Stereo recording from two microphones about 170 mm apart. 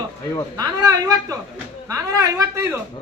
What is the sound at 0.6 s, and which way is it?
A woman's voice, 20° right (ahead or behind).